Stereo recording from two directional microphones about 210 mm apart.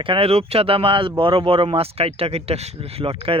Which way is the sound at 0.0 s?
25° right (ahead or behind).